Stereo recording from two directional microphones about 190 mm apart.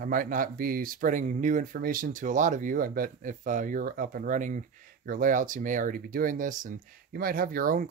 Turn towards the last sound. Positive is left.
turn(degrees=-50)  # may be behind; listen again after turning